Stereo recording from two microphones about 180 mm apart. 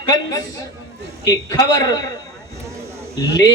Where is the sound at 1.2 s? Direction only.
20° left (ahead or behind).